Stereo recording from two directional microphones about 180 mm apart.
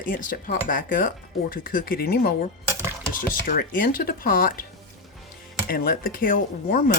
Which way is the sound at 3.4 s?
50° left (ahead or behind).